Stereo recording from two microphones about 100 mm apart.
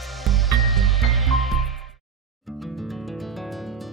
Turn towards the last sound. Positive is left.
turn(degrees=0)  # may be behind; listen again after turning